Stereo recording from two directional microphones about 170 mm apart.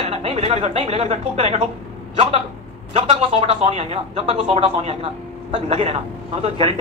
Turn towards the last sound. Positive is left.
turn(degrees=-40)  # may be behind; listen again after turning